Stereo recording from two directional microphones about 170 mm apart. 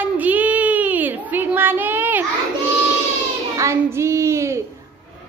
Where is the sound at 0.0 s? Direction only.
10° right (ahead or behind).